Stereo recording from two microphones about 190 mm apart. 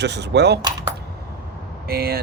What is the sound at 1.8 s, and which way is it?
Speech, 55° right (ahead or behind).